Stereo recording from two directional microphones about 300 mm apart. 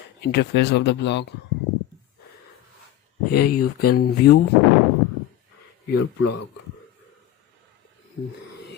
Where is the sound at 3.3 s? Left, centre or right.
Left.